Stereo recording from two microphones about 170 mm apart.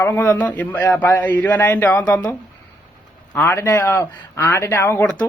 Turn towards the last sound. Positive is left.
turn(degrees=10)  # may be behind; listen again after turning